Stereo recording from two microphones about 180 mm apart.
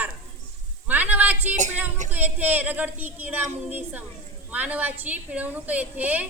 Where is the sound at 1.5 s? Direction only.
40° right (ahead or behind).